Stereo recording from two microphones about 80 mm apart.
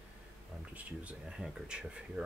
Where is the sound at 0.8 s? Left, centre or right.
Centre.